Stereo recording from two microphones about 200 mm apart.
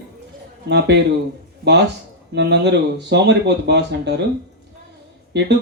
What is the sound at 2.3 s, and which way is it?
Speech, 55° right (ahead or behind).